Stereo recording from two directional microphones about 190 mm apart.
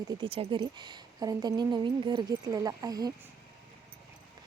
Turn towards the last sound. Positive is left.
turn(degrees=-20)  # may be behind; listen again after turning